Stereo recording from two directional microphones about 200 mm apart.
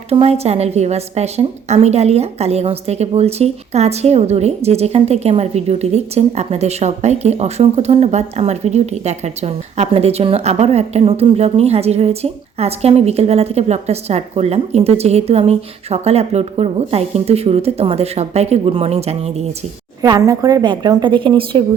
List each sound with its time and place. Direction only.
0.1 s a woman's voice: 30° right (ahead or behind)
20.0 s a woman's voice: 20° right (ahead or behind)